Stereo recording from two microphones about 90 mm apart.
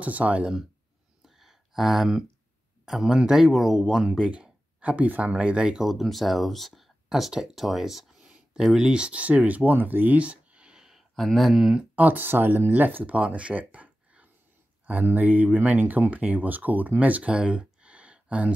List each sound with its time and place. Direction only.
0.0 s speech: 15° right (ahead or behind)
1.2 s a sound: 5° right (ahead or behind)
2.8 s speech: 5° right (ahead or behind)
11.9 s speech: 20° right (ahead or behind)